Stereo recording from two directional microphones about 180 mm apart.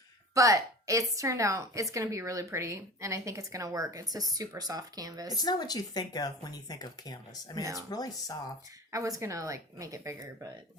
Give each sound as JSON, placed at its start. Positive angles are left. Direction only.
{"t": 0.3, "sound": "a woman's voice", "side_deg": -15}
{"t": 5.3, "sound": "speech", "side_deg": 20}
{"t": 8.9, "sound": "a woman's voice", "side_deg": -20}